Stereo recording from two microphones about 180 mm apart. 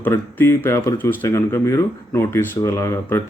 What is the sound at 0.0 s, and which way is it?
Speech, 10° left (ahead or behind).